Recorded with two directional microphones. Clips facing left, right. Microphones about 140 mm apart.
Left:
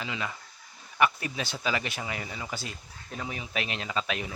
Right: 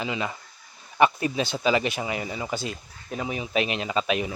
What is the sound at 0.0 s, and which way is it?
A man's voice, 20° right (ahead or behind).